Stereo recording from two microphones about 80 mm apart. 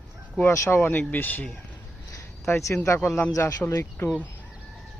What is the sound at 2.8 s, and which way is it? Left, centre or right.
Speech, left.